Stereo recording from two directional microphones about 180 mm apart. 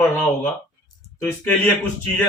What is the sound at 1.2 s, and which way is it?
Speech, 10° left (ahead or behind).